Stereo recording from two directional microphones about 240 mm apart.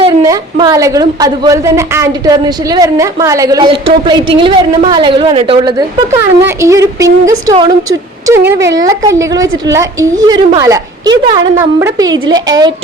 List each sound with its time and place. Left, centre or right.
0.0 s a woman's voice: centre